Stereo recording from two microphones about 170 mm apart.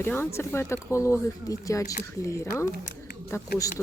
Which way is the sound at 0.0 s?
15° left (ahead or behind).